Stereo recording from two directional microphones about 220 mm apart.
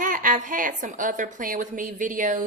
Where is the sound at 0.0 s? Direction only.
40° right (ahead or behind).